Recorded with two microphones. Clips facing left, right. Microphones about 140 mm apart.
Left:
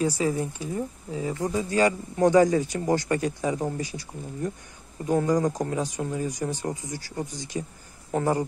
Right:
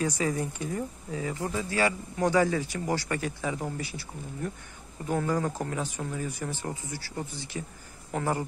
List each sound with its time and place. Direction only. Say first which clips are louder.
0.0 s speech: left 3 dB; 10° left (ahead or behind)
5.0 s speech: left 5 dB; 15° left (ahead or behind)
6.1 s speech: left 5 dB; 40° left (ahead or behind)
6.4 s speech: left 5 dB; 15° left (ahead or behind)